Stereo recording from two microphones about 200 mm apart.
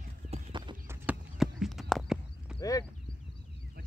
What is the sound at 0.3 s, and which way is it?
Clip-clop, 25° right (ahead or behind).